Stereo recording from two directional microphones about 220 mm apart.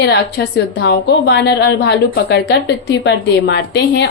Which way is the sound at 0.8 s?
50° left (ahead or behind).